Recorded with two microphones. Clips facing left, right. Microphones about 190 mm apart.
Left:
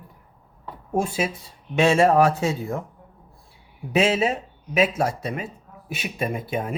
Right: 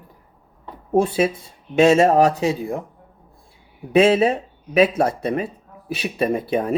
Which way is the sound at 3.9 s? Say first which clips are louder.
Right 6 dB; 55° right (ahead or behind).